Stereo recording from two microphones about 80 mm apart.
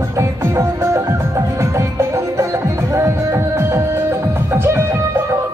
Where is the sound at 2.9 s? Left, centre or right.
Right.